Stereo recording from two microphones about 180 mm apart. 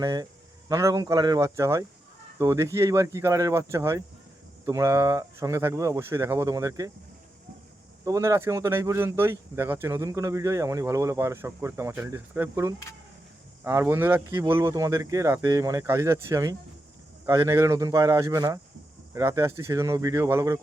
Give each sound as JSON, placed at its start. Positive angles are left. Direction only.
{"t": 0.0, "sound": "speech", "side_deg": -20}
{"t": 8.0, "sound": "speech", "side_deg": -20}